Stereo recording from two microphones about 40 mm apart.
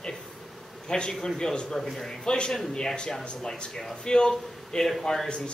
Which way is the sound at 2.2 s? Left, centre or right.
Left.